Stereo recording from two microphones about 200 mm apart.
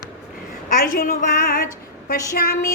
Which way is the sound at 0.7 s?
45° left (ahead or behind).